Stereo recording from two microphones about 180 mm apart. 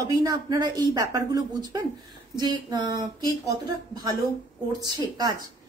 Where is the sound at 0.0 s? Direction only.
20° right (ahead or behind).